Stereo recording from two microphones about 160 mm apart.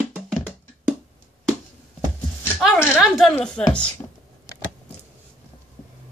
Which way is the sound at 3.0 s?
Centre (ahead or behind).